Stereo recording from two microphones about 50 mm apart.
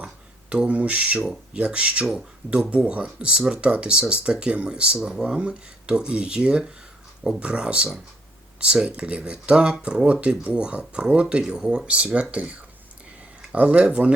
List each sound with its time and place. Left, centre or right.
0.5 s speech: right
11.9 s speech: right